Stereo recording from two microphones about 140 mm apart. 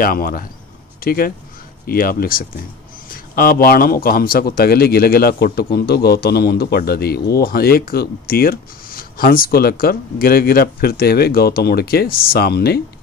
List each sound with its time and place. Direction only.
0.0 s speech: 90° left